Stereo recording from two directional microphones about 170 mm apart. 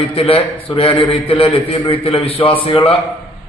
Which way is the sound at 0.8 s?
30° left (ahead or behind).